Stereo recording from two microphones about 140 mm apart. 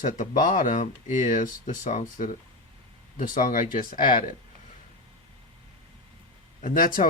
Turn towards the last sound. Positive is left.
turn(degrees=80)